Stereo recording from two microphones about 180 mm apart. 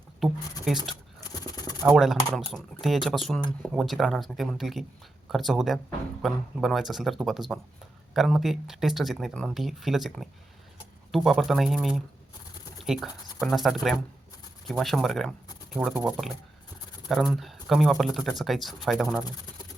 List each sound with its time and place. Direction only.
0.2 s speech: centre (ahead or behind)
1.3 s a sound: 20° left (ahead or behind)
2.3 s speech: centre (ahead or behind)